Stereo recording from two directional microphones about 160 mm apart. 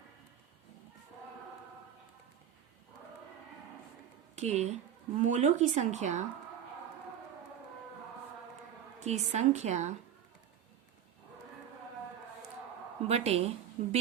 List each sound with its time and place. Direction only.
4.4 s speech: 45° right (ahead or behind)
9.0 s speech: 45° right (ahead or behind)
13.1 s speech: 40° right (ahead or behind)